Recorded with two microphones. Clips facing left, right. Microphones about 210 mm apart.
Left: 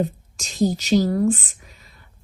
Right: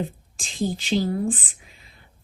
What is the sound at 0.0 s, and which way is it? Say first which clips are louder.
A woman's voice: left 6 dB; 45° left (ahead or behind).